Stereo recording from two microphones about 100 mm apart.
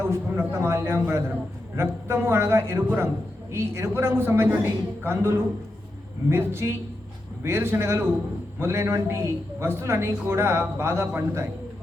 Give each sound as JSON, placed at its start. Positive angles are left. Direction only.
{"t": 0.0, "sound": "a man's voice", "side_deg": -25}